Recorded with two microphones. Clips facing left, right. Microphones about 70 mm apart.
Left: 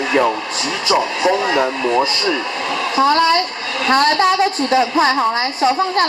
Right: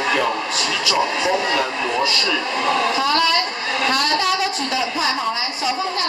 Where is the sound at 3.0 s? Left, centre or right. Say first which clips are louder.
Left 5 dB; left.